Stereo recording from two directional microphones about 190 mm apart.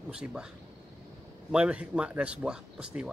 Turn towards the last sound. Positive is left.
turn(degrees=-5)  # may be behind; listen again after turning